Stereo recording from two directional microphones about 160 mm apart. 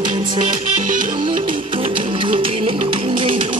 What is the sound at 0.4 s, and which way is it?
Music, 55° right (ahead or behind).